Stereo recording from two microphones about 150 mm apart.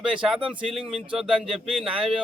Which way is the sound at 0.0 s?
5° right (ahead or behind).